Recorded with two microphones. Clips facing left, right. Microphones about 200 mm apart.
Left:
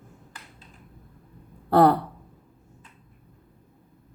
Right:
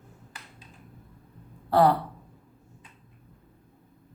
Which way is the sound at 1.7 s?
55° left (ahead or behind).